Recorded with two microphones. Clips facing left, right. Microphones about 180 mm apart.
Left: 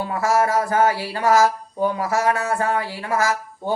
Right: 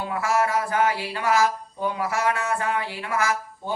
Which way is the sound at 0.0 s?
40° left (ahead or behind).